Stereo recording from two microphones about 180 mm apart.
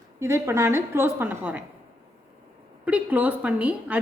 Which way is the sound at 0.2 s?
15° right (ahead or behind).